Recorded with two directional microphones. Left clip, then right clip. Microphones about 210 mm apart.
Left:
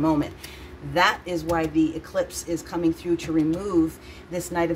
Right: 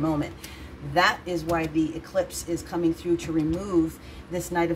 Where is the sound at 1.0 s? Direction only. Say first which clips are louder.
Left 1 dB; 15° left (ahead or behind).